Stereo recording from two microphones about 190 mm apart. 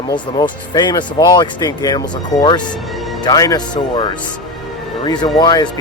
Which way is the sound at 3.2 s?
20° left (ahead or behind).